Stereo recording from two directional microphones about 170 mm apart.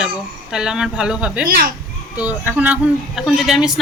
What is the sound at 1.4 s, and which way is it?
Speech, 60° right (ahead or behind).